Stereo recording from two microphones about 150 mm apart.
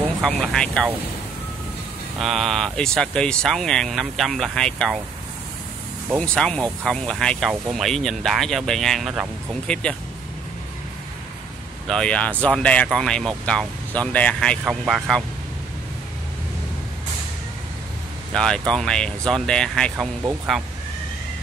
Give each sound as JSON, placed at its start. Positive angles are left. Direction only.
{"t": 0.2, "sound": "speech", "side_deg": 5}
{"t": 2.1, "sound": "speech", "side_deg": 0}
{"t": 6.1, "sound": "speech", "side_deg": 5}
{"t": 11.9, "sound": "speech", "side_deg": 5}
{"t": 14.6, "sound": "speech", "side_deg": -5}
{"t": 18.3, "sound": "speech", "side_deg": 5}